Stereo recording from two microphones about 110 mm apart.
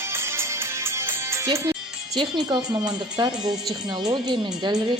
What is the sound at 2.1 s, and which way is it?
Speech, 45° right (ahead or behind).